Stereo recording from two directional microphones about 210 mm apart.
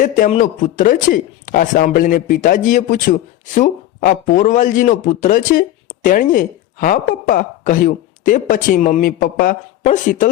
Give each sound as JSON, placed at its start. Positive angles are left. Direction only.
{"t": 0.0, "sound": "speech", "side_deg": 40}